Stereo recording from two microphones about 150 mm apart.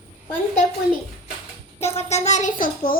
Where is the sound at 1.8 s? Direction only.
45° left (ahead or behind); by 3.0 s 70° left (ahead or behind).